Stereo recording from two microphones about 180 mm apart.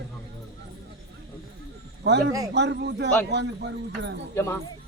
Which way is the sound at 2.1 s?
70° right (ahead or behind).